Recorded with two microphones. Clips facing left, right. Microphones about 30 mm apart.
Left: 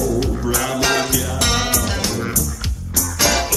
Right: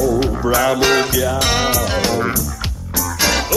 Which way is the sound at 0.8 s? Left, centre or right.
Centre.